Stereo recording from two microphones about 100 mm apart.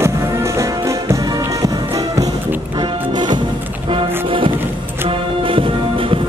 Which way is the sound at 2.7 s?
55° right (ahead or behind).